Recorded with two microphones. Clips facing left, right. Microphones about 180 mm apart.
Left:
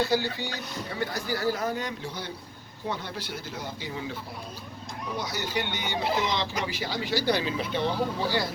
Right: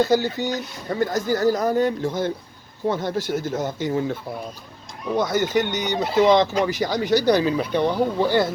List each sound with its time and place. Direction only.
0.0 s speech: 45° right (ahead or behind)